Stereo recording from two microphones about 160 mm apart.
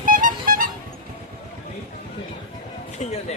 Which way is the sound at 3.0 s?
45° left (ahead or behind).